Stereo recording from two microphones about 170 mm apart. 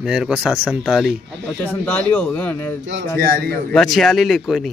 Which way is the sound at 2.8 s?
80° right.